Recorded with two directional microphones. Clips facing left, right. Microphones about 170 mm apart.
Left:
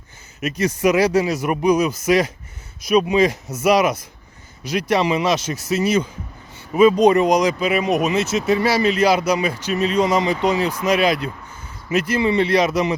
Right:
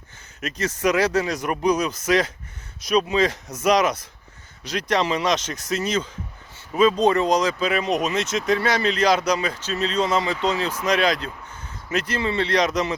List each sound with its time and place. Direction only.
0.4 s speech: 10° left (ahead or behind)